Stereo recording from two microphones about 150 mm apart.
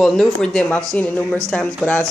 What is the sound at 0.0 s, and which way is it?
Speech, centre (ahead or behind).